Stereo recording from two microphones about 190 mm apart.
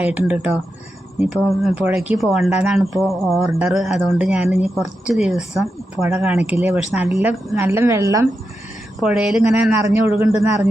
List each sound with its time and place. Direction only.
0.0 s a woman's voice: 10° right (ahead or behind)
3.4 s speech: 15° right (ahead or behind)
3.7 s a woman's voice: centre (ahead or behind)
6.0 s speech: 10° right (ahead or behind)
9.0 s a woman's voice: 5° right (ahead or behind)